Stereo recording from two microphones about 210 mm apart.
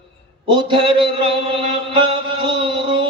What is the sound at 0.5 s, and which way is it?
Chant, 25° right (ahead or behind).